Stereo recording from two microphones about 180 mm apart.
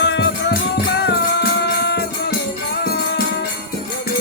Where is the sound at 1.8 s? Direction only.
65° left (ahead or behind).